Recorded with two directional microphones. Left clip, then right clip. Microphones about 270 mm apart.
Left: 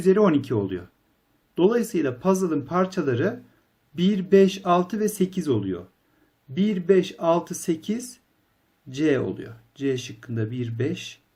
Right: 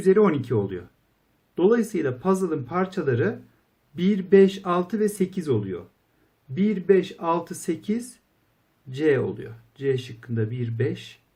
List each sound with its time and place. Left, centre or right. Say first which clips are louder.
0.0 s speech: even; centre